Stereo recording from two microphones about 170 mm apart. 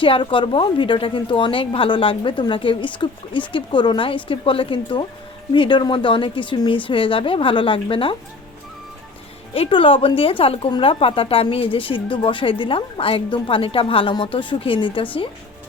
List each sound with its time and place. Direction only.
0.0 s a woman's voice: 30° left (ahead or behind)
9.6 s a woman's voice: 30° left (ahead or behind)